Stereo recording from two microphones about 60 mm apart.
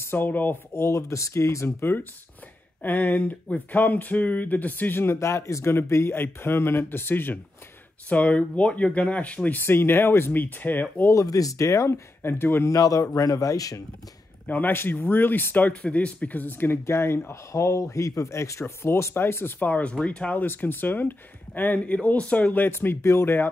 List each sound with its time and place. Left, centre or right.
0.0 s speech: left
0.7 s speech: left
2.8 s speech: left
5.1 s speech: left
8.1 s speech: left
9.6 s speech: left
11.1 s speech: left
12.2 s speech: left
12.6 s a man's voice: left
14.4 s speech: left
16.8 s speech: left
19.6 s speech: left
20.4 s speech: left
22.7 s speech: left